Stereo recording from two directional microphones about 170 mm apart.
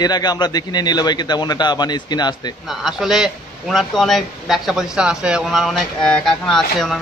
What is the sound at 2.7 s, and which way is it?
A man's voice, centre (ahead or behind).